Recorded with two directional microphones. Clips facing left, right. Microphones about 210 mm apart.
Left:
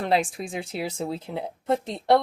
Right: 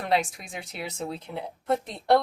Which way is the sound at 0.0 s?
30° left (ahead or behind).